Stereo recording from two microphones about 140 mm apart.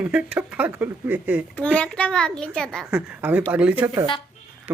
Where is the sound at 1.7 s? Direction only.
10° left (ahead or behind).